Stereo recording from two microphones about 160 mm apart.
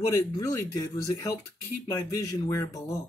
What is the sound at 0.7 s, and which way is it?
Speech, 20° left (ahead or behind).